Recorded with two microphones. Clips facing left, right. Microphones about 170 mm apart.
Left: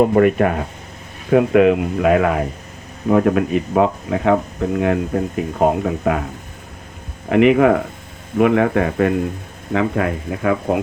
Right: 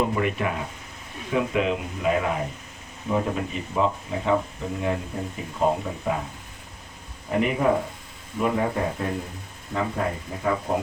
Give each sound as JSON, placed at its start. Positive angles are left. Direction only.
{"t": 0.0, "sound": "speech", "side_deg": 50}
{"t": 7.3, "sound": "speech", "side_deg": 75}